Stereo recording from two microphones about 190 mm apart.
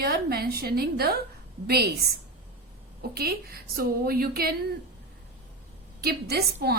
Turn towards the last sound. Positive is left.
turn(degrees=-55)  # may be behind; listen again after turning